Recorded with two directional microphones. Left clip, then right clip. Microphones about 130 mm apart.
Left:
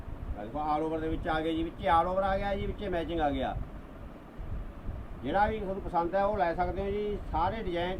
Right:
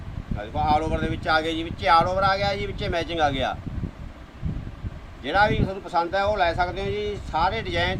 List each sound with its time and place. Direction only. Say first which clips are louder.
0.6 s speech: right 8 dB; 25° right (ahead or behind)
5.2 s speech: right 8 dB; 30° right (ahead or behind)